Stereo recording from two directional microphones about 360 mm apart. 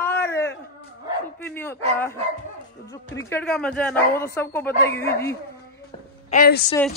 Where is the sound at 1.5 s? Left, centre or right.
Centre.